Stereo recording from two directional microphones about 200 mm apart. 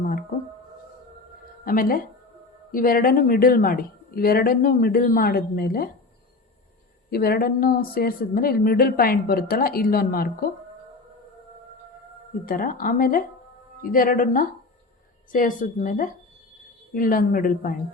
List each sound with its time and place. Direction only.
0.0 s speech: 45° left (ahead or behind)
1.6 s a woman's voice: 45° left (ahead or behind)
7.1 s a woman's voice: 50° left (ahead or behind)
12.5 s a woman's voice: 45° left (ahead or behind)